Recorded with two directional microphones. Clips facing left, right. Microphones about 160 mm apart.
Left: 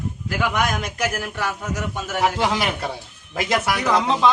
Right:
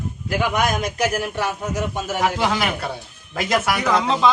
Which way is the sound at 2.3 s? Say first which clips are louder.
Even; 25° left (ahead or behind).